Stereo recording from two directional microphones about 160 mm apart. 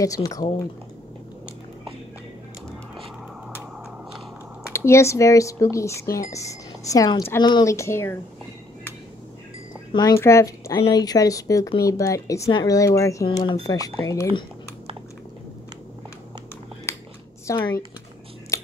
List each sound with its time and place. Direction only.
0.0 s speech: 20° left (ahead or behind)
4.7 s speech: 15° left (ahead or behind)
9.9 s speech: 20° left (ahead or behind)
16.9 s a sound: 15° left (ahead or behind)
17.5 s computer keyboard: 20° left (ahead or behind)
18.5 s scissors: 20° left (ahead or behind)